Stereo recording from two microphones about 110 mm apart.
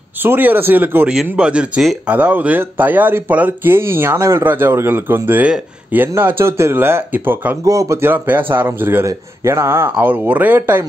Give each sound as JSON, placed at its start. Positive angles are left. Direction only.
{"t": 0.2, "sound": "speech", "side_deg": -20}
{"t": 7.6, "sound": "speech", "side_deg": -30}